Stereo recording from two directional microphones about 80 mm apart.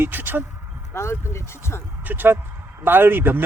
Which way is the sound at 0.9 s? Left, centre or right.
Left.